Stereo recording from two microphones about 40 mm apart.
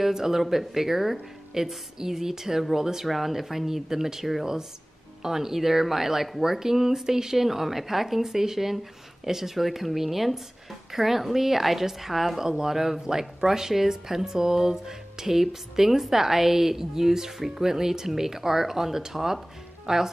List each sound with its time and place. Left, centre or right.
0.0 s a woman's voice: centre